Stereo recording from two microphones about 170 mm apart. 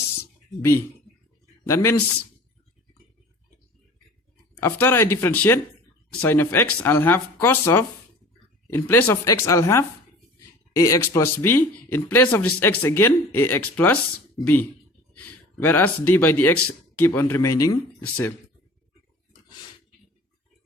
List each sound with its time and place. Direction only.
1.6 s speech: 15° left (ahead or behind)
4.6 s speech: 15° left (ahead or behind)